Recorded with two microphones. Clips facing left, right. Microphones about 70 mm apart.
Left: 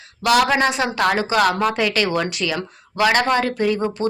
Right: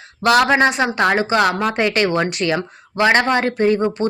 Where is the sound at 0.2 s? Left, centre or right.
Right.